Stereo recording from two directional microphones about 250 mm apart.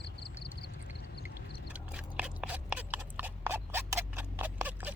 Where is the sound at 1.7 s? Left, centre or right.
Centre.